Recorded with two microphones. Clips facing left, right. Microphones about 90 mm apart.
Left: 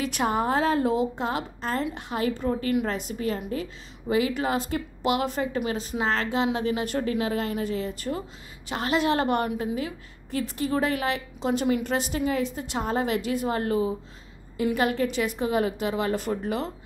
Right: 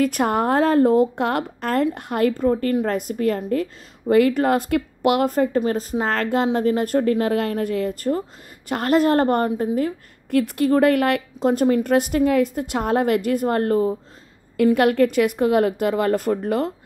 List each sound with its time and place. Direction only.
0.0 s a woman's voice: 50° right (ahead or behind)
1.2 s a woman's voice: 60° right (ahead or behind)
10.3 s a woman's voice: 60° right (ahead or behind)
14.6 s a woman's voice: 60° right (ahead or behind)